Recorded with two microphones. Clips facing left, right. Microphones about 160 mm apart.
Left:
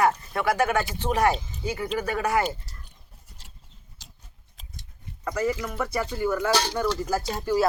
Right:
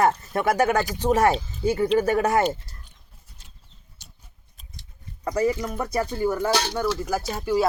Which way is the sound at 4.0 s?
90° left.